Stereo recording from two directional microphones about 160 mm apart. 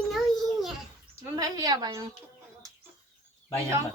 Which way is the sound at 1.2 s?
20° right (ahead or behind).